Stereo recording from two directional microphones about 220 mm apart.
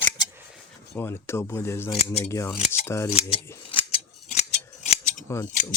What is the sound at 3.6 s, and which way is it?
Scissors, 25° left (ahead or behind).